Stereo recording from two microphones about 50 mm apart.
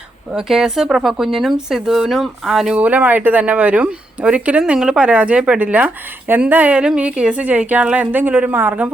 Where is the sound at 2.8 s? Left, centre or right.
Right.